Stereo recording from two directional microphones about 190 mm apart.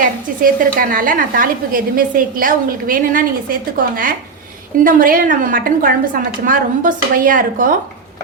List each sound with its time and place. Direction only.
0.4 s a woman's voice: 50° right (ahead or behind)